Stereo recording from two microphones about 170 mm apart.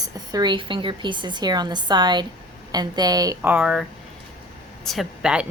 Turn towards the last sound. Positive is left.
turn(degrees=-5)  # may be behind; listen again after turning